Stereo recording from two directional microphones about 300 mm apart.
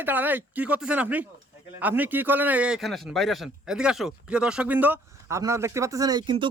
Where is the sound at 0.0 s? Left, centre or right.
Centre.